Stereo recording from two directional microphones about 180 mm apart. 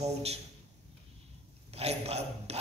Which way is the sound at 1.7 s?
35° right (ahead or behind).